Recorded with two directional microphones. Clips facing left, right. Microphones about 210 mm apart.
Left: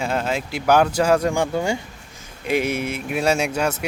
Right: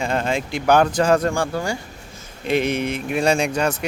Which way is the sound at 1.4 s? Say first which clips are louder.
Left 2 dB; 20° left (ahead or behind).